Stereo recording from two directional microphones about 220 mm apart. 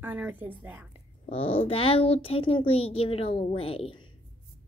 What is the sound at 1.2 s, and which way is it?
A child's voice, 25° left (ahead or behind).